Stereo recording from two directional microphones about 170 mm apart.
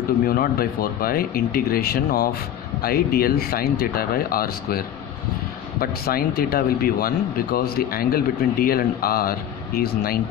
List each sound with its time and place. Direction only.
0.3 s speech: 60° left (ahead or behind)